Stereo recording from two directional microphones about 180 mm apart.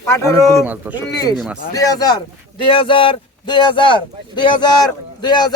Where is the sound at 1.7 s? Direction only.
20° left (ahead or behind).